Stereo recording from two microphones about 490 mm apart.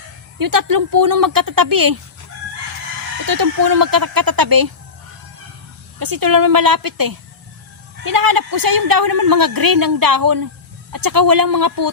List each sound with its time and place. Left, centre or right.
0.3 s a woman's voice: right
3.2 s a woman's voice: right
6.0 s a woman's voice: right